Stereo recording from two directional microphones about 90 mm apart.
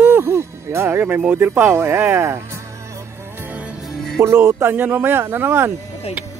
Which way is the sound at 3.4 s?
15° right (ahead or behind).